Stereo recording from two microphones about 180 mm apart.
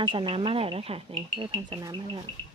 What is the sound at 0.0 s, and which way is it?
Speech, 30° right (ahead or behind).